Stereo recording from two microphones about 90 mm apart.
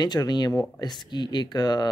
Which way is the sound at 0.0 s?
50° left (ahead or behind).